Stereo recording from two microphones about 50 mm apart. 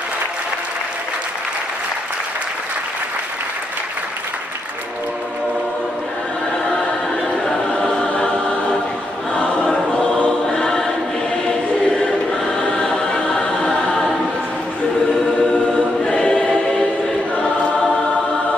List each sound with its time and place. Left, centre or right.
6.6 s choir: centre
8.1 s music: left
9.3 s choir: left
12.5 s music: centre
16.1 s choir: centre